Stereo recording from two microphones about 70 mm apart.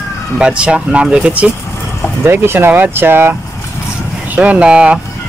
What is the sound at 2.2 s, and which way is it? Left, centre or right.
Speech, right.